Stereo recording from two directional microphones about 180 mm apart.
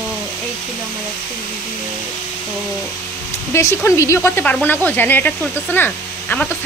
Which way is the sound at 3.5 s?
15° left (ahead or behind).